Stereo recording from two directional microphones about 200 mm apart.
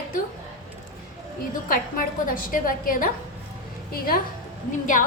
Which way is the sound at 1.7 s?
45° left (ahead or behind).